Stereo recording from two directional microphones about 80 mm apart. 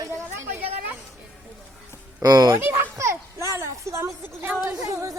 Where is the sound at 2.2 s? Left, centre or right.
Right.